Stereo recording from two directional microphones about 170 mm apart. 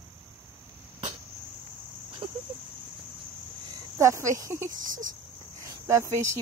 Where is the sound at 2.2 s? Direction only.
35° right (ahead or behind).